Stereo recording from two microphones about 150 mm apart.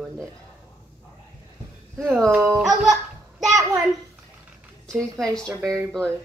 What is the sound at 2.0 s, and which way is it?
Speech, centre (ahead or behind).